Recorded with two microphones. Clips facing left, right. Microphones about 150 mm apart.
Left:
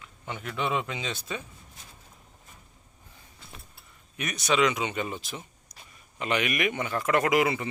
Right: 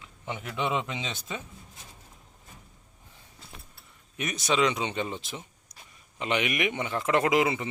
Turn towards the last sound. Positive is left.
turn(degrees=-20)  # may be behind; listen again after turning